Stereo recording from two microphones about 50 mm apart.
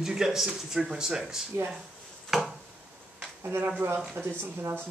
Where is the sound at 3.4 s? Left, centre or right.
Right.